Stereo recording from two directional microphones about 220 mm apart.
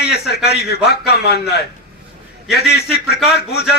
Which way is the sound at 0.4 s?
45° left (ahead or behind).